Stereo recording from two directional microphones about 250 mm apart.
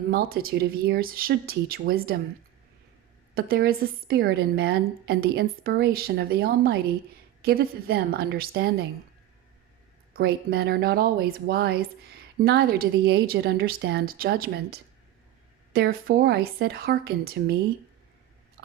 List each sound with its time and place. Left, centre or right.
0.1 s speech: right
3.3 s speech: right
10.2 s speech: right